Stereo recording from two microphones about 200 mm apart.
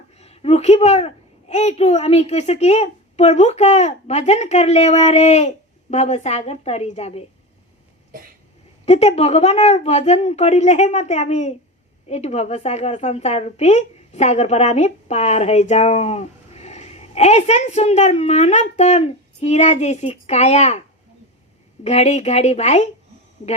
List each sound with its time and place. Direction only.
0.2 s a woman's voice: 30° left (ahead or behind)
8.9 s a woman's voice: 30° left (ahead or behind)
21.8 s a woman's voice: 35° left (ahead or behind)